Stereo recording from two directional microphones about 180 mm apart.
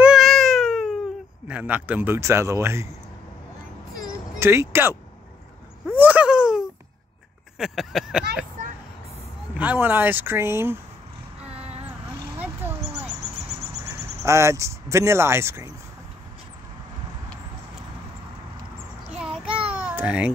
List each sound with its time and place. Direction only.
0.0 s baby cry: centre (ahead or behind)
1.5 s a man's voice: 10° right (ahead or behind)
4.4 s speech: 15° right (ahead or behind)
5.9 s a sound: 10° right (ahead or behind)
9.6 s a man's voice: 10° right (ahead or behind)
13.8 s speech: 15° right (ahead or behind)
19.1 s a sound: 5° right (ahead or behind)